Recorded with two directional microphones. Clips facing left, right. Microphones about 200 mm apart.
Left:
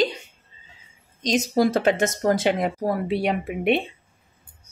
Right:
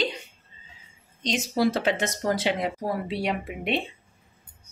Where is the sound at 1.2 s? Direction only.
45° left (ahead or behind).